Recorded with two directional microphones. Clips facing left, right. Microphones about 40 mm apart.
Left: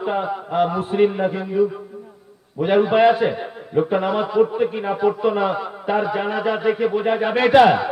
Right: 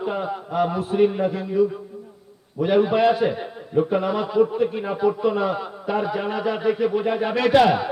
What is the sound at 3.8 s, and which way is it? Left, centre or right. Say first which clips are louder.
A man's voice: left 2 dB; left.